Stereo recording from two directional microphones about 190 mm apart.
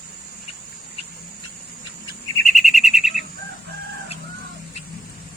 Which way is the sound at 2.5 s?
Centre (ahead or behind).